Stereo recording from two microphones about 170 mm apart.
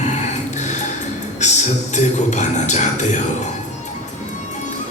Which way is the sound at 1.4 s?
45° left (ahead or behind).